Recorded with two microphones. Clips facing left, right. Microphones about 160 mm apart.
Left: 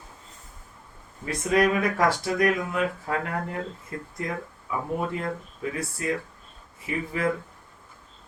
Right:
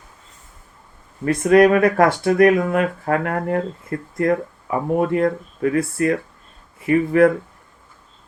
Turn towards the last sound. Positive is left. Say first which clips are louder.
# right 13 dB
turn(degrees=-60)  # may be behind; listen again after turning